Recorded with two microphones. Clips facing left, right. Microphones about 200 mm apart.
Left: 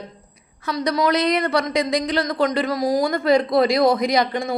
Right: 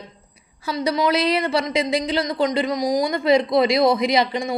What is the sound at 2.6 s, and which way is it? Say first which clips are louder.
Speech: left 1 dB; 15° right (ahead or behind).